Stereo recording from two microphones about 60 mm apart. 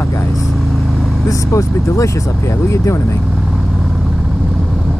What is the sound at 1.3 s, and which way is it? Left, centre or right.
Speech, left.